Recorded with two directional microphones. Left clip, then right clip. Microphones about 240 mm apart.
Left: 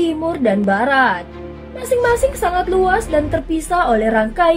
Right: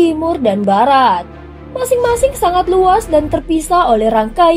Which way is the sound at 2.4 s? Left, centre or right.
Right.